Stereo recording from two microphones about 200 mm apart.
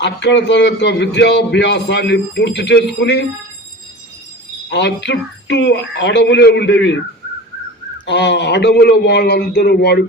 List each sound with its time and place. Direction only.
0.0 s a man's voice: 60° left (ahead or behind)
4.7 s a man's voice: 60° left (ahead or behind)
8.0 s a man's voice: 60° left (ahead or behind)